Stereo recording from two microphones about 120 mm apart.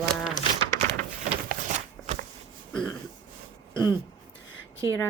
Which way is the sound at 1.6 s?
90° right.